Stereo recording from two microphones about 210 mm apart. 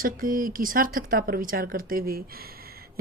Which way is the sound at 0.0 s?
40° right (ahead or behind).